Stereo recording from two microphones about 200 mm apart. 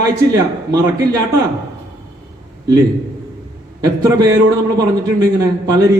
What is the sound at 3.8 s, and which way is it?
Speech, 15° right (ahead or behind).